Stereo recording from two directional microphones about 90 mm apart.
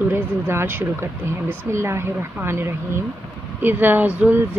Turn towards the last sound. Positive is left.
turn(degrees=-15)  # may be behind; listen again after turning